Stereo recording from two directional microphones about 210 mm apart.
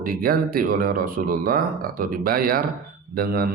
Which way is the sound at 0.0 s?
45° right (ahead or behind).